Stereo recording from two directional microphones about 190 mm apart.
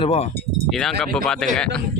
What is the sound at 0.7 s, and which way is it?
Speech, centre (ahead or behind).